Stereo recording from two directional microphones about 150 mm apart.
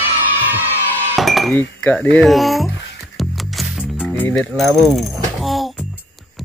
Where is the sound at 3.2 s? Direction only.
Centre (ahead or behind).